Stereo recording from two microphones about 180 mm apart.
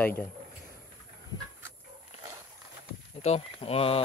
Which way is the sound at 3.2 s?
35° left (ahead or behind).